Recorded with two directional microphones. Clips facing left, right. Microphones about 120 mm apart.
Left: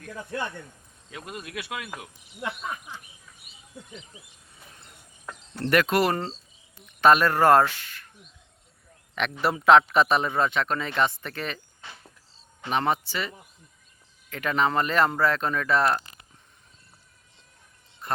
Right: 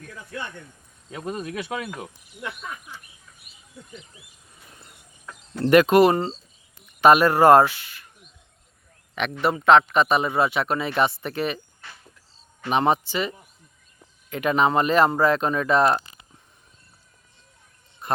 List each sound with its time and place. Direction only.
1.1 s speech: 35° right (ahead or behind)
5.6 s a man's voice: 20° right (ahead or behind)
6.1 s speech: centre (ahead or behind)
6.8 s speech: 15° right (ahead or behind)
9.4 s a man's voice: centre (ahead or behind); by 11.6 s 15° right (ahead or behind)
12.6 s speech: 20° right (ahead or behind)
18.0 s a sound: 15° right (ahead or behind)